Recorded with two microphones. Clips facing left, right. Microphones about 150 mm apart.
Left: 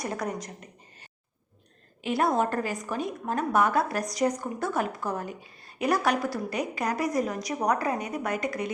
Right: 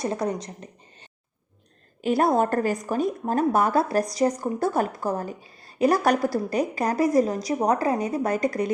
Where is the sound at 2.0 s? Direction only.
40° right (ahead or behind).